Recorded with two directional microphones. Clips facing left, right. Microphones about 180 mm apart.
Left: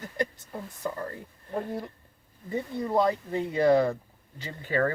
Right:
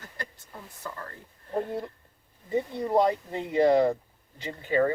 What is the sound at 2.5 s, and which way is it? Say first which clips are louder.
Speech: right 2 dB; 20° right (ahead or behind).